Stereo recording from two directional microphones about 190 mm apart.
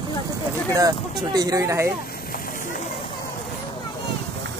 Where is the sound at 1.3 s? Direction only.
20° right (ahead or behind).